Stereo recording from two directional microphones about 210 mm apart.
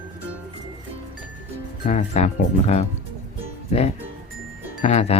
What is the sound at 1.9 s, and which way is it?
Speech, 30° left (ahead or behind).